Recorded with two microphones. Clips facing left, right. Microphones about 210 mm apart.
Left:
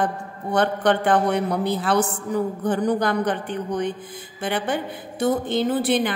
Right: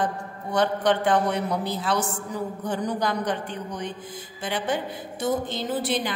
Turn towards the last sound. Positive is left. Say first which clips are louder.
# left 6 dB
turn(degrees=55)  # may be behind; listen again after turning